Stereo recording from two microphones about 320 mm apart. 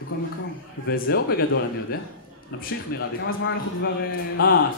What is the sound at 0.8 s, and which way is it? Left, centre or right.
Speech, left.